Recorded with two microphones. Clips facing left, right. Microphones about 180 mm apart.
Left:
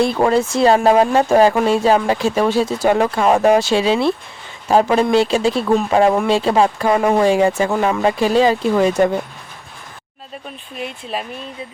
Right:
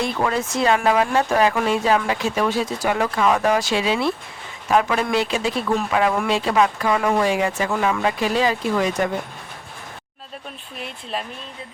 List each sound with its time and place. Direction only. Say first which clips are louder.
0.0 s speech: left 7 dB; 30° left (ahead or behind)
10.8 s speech: left 4 dB; 5° left (ahead or behind)